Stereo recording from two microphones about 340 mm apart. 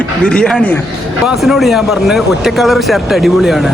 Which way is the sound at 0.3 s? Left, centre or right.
Centre.